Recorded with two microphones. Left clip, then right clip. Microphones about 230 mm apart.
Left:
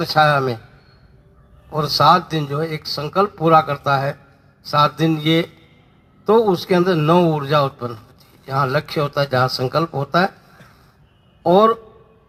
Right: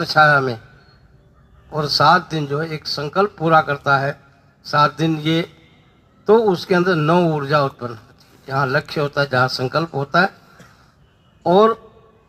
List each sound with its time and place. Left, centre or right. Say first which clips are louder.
0.0 s a man's voice: right 2 dB; left
1.7 s a man's voice: even; left
11.4 s a man's voice: even; left